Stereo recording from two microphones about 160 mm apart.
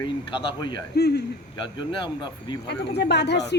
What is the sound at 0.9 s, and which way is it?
Speech, 90° left.